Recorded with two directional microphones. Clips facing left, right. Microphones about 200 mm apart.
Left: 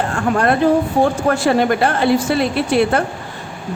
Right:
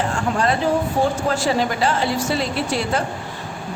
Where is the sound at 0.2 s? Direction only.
55° left (ahead or behind).